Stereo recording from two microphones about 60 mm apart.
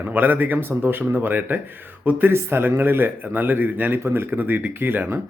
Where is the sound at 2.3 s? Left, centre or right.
Right.